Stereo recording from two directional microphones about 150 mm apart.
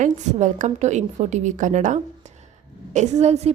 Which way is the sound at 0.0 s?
55° right (ahead or behind).